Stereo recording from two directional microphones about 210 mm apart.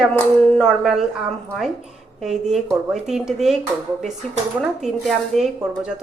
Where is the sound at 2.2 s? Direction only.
Centre (ahead or behind).